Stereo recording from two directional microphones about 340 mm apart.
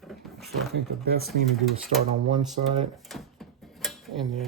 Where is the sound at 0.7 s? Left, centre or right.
Right.